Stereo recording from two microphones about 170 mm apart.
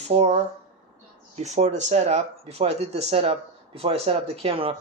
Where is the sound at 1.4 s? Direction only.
40° right (ahead or behind).